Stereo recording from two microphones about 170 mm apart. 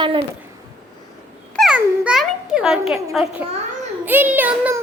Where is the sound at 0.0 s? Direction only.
30° right (ahead or behind).